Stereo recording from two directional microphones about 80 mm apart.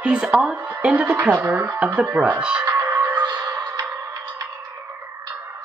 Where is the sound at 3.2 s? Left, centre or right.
Right.